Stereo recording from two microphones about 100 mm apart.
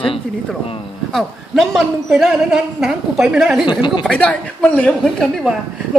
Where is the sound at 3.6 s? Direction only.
50° left (ahead or behind).